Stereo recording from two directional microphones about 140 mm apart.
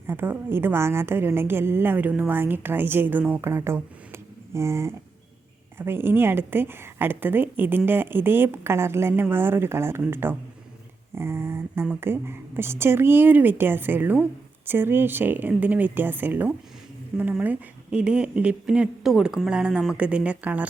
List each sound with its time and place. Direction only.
0.1 s a woman's voice: 15° right (ahead or behind)